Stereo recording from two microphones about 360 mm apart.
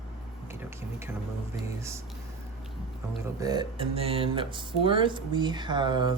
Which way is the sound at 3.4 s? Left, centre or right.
Centre.